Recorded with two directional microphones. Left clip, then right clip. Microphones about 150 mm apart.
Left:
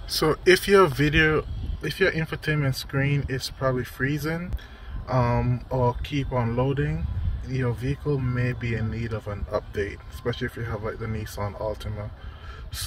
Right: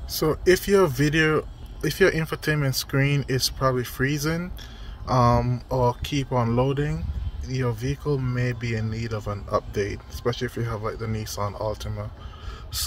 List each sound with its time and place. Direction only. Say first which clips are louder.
0.1 s speech: left 1 dB; 25° right (ahead or behind)
5.7 s speech: right 2 dB; 45° right (ahead or behind)
6.3 s speech: right 2 dB; 25° right (ahead or behind)
11.5 s speech: right 1 dB; 40° right (ahead or behind)